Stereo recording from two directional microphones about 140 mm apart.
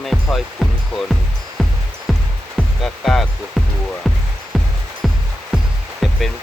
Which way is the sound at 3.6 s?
Centre (ahead or behind).